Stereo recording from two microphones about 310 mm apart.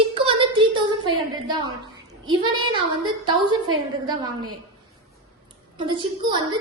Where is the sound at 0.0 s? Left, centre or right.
Centre.